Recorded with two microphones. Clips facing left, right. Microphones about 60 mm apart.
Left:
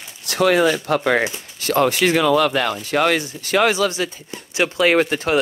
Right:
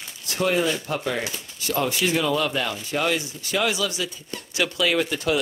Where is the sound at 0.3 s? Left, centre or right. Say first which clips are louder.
Left 7 dB; left.